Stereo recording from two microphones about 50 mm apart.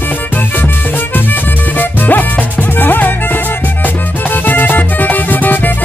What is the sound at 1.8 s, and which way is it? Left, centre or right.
Music, left.